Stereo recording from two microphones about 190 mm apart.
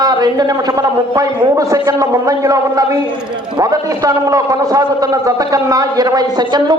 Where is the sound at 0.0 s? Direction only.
20° right (ahead or behind).